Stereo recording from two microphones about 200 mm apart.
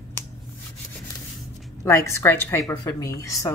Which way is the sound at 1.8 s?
15° left (ahead or behind).